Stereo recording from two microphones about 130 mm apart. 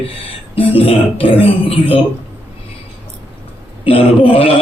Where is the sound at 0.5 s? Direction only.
45° left (ahead or behind).